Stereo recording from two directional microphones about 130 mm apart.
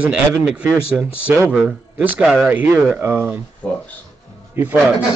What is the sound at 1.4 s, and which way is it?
Speech, 5° right (ahead or behind).